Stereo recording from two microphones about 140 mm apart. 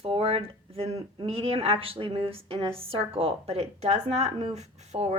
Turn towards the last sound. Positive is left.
turn(degrees=-50)  # may be behind; listen again after turning